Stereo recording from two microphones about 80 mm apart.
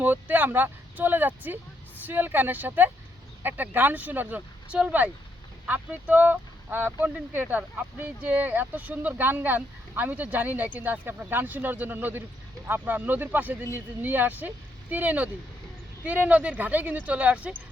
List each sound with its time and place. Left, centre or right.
0.0 s speech: right